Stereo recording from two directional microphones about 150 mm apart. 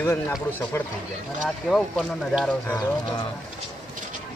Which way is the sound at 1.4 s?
5° left (ahead or behind).